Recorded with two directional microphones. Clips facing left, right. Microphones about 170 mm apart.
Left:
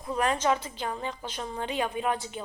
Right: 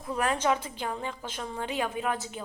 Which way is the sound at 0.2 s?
10° right (ahead or behind).